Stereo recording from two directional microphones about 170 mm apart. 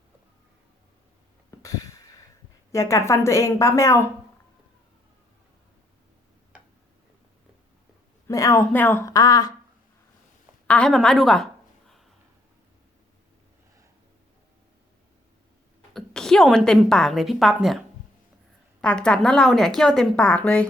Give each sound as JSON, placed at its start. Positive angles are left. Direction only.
{"t": 1.5, "sound": "a sound", "side_deg": 20}
{"t": 2.7, "sound": "a woman's voice", "side_deg": 20}
{"t": 8.3, "sound": "speech", "side_deg": 20}
{"t": 10.7, "sound": "a woman's voice", "side_deg": 5}
{"t": 15.9, "sound": "a woman's voice", "side_deg": 0}
{"t": 18.8, "sound": "a woman's voice", "side_deg": 5}